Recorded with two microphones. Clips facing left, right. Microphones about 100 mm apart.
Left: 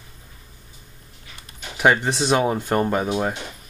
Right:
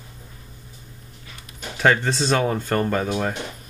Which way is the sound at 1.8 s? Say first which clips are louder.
Left 1 dB; 15° left (ahead or behind).